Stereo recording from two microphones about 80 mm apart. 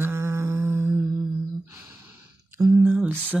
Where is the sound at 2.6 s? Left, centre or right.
Right.